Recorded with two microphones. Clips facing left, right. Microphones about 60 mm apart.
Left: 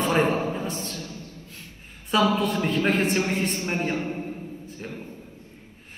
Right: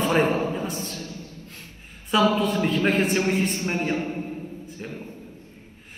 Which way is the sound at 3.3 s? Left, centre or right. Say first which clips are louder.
Right 2 dB; left.